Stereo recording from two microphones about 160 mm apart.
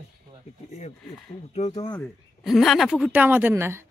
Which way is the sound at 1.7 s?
30° left (ahead or behind).